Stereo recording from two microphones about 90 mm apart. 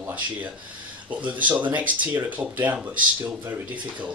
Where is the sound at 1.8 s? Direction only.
20° right (ahead or behind).